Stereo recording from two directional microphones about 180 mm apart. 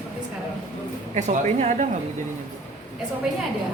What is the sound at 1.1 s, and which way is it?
Speech, 40° right (ahead or behind).